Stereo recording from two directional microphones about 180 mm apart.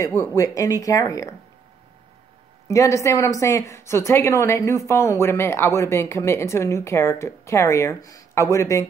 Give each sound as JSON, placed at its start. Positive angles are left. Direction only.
{"t": 0.0, "sound": "a woman's voice", "side_deg": 15}
{"t": 2.7, "sound": "a woman's voice", "side_deg": 15}